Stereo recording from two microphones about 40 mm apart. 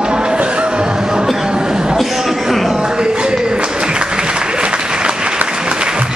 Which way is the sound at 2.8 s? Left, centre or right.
Centre.